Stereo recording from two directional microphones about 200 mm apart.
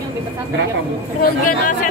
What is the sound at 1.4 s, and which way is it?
Speech, 40° left (ahead or behind).